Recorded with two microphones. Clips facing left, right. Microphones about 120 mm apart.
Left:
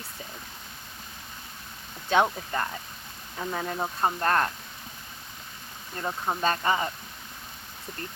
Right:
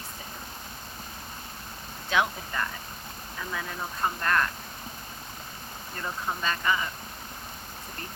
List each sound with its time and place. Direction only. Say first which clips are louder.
2.0 s speech: left 4 dB; 35° left (ahead or behind)
6.0 s speech: left 4 dB; 35° left (ahead or behind)